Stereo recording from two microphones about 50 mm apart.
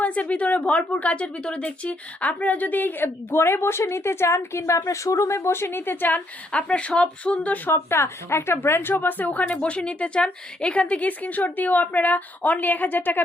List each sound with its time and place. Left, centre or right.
0.0 s a woman's voice: left
3.3 s speech: left
4.9 s speech: left
6.5 s a woman's voice: left
7.7 s a woman's voice: left